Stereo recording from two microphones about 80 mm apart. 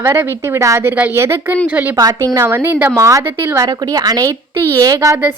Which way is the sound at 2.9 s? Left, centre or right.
Right.